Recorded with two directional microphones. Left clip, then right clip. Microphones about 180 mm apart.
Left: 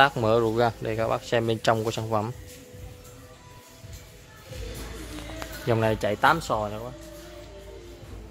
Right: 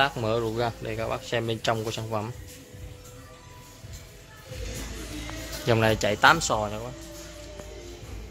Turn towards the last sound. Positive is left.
turn(degrees=5)  # may be behind; listen again after turning